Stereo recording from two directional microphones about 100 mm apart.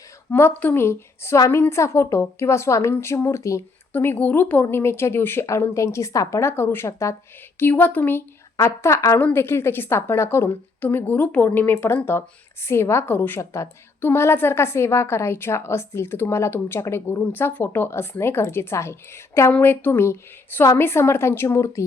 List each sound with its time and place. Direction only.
0.3 s a woman's voice: 25° left (ahead or behind)
3.9 s a woman's voice: 20° left (ahead or behind)